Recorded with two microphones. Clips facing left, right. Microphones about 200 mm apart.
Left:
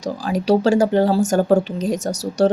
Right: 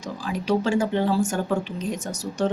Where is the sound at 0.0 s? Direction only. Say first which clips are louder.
Left 7 dB; 40° left (ahead or behind).